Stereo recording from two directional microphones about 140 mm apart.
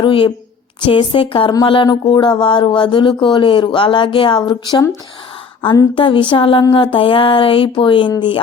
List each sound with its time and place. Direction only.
0.0 s speech: 35° left (ahead or behind)